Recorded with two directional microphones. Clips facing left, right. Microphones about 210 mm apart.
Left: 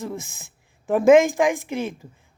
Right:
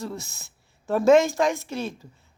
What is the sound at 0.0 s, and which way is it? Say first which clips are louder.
Speech: left 2 dB; 15° left (ahead or behind).